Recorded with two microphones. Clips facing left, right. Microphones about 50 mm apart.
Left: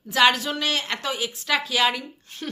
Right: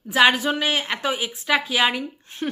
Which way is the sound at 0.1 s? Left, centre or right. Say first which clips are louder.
Right 2 dB; centre.